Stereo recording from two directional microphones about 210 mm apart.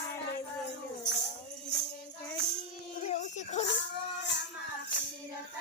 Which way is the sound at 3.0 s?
35° left (ahead or behind).